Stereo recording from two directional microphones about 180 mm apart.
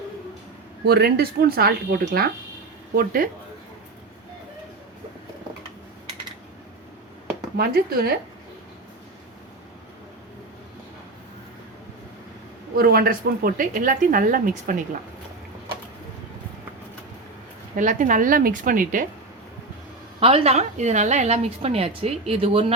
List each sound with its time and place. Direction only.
0.9 s speech: 60° right (ahead or behind)
7.5 s speech: 60° right (ahead or behind)
12.7 s speech: 60° right (ahead or behind)
17.7 s speech: 45° right (ahead or behind)
20.1 s a woman's voice: 35° right (ahead or behind)